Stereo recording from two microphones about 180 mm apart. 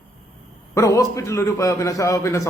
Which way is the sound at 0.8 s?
15° left (ahead or behind).